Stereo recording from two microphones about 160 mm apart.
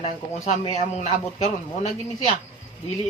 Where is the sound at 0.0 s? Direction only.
45° left (ahead or behind).